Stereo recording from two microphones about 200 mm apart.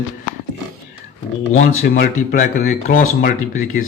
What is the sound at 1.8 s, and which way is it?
Speech, 45° left (ahead or behind).